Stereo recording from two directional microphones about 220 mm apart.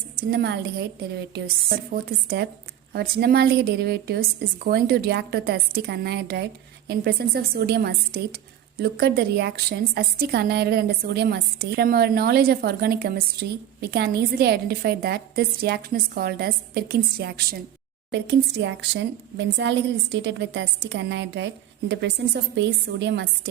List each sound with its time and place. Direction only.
0.3 s a woman's voice: 50° right (ahead or behind)
1.9 s a woman's voice: 45° right (ahead or behind)